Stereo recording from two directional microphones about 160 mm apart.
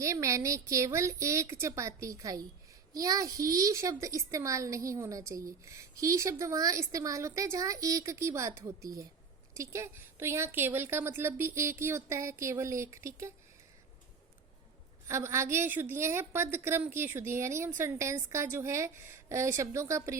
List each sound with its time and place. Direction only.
0.0 s a child's voice: 20° right (ahead or behind)
15.0 s speech: 15° right (ahead or behind)